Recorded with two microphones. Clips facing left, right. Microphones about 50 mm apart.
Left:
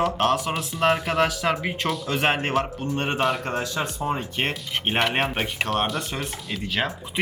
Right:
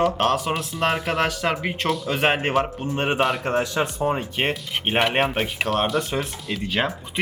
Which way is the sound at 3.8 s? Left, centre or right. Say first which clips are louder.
Right 4 dB; centre.